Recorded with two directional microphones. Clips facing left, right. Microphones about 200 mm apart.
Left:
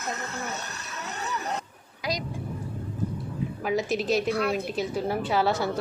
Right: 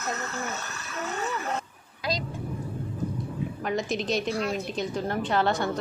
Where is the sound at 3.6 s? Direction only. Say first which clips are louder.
Left 3 dB; 5° left (ahead or behind).